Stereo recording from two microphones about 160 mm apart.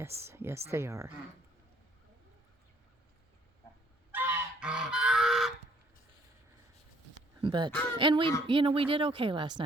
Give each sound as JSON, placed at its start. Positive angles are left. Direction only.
{"t": 0.2, "sound": "speech", "side_deg": -15}
{"t": 4.1, "sound": "goose", "side_deg": -10}
{"t": 7.4, "sound": "speech", "side_deg": -30}